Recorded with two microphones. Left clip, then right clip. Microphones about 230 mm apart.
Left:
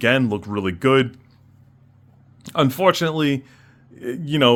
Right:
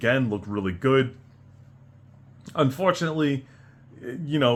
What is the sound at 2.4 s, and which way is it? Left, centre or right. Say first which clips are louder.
Speech: left 5 dB; left.